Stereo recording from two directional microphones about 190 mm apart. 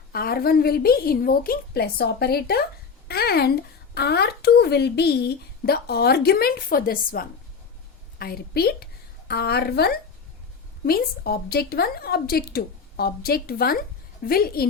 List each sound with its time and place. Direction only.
0.1 s a woman's voice: 50° left (ahead or behind)